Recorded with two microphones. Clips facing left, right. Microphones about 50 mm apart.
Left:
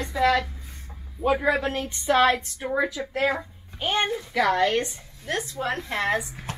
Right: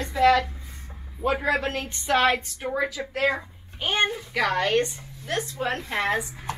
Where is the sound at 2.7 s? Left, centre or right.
Centre.